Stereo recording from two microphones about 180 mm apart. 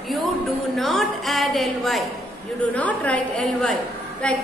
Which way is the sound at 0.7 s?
Centre (ahead or behind).